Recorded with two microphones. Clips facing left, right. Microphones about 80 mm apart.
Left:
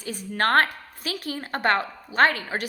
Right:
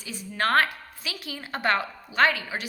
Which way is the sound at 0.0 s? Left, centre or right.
Left.